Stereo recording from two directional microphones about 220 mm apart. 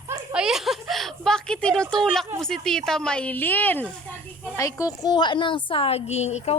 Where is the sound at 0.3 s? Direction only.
Centre (ahead or behind).